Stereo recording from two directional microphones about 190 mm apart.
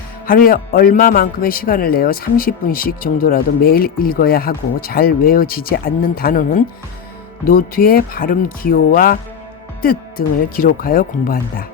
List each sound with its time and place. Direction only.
0.3 s speech: 50° left (ahead or behind)